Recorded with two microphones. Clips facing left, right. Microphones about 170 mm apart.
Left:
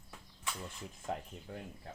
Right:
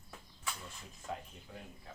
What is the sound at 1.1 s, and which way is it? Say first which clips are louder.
Speech: left 3 dB; 60° left (ahead or behind).